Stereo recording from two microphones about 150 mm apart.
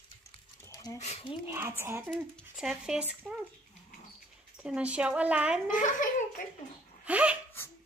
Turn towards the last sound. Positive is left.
turn(degrees=-10)  # may be behind; listen again after turning